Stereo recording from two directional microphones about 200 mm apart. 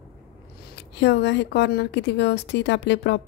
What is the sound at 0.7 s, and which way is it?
Speech, 60° left (ahead or behind).